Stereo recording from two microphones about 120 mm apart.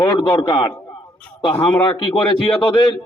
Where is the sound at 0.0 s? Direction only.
30° left (ahead or behind).